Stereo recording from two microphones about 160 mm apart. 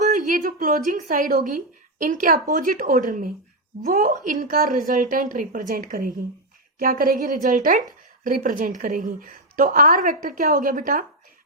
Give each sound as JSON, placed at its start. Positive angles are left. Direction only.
{"t": 0.0, "sound": "a woman's voice", "side_deg": -55}